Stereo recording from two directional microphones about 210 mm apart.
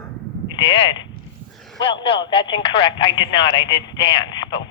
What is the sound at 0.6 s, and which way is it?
Speech, 25° left (ahead or behind).